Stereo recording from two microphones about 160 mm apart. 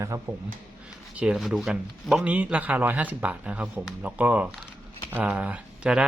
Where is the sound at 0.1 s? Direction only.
20° right (ahead or behind).